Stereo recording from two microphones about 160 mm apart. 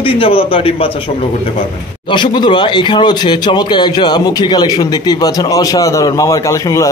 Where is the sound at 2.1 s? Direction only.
30° left (ahead or behind).